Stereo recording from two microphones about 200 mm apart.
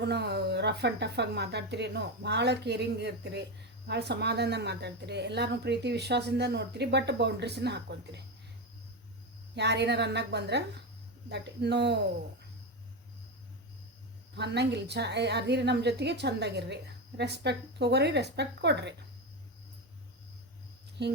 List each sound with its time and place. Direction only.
0.0 s a woman's voice: 55° right (ahead or behind)
9.6 s a woman's voice: 55° right (ahead or behind)
14.3 s a woman's voice: 60° right (ahead or behind)
21.0 s a woman's voice: 55° right (ahead or behind)